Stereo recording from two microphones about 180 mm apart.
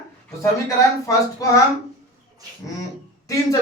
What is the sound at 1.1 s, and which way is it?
Speech, 20° left (ahead or behind).